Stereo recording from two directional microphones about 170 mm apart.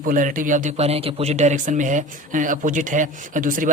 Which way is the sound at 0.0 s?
50° right (ahead or behind).